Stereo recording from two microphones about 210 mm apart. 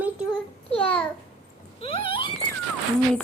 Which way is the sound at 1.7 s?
25° left (ahead or behind).